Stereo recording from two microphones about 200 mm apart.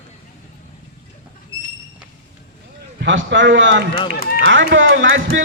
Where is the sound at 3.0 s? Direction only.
65° right (ahead or behind).